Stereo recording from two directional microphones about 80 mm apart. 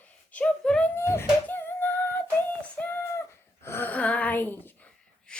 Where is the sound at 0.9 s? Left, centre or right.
Left.